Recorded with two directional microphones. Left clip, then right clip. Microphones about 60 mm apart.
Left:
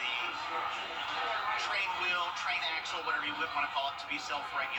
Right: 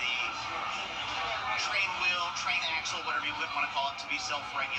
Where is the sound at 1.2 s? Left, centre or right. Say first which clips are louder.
Right 1 dB; left.